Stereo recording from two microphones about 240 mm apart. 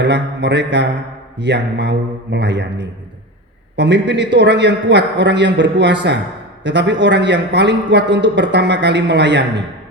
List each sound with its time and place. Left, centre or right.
0.0 s a man's voice: right